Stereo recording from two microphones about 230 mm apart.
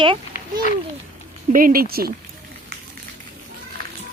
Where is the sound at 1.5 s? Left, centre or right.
Right.